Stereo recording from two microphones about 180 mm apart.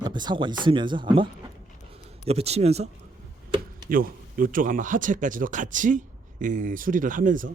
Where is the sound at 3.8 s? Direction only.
50° right (ahead or behind).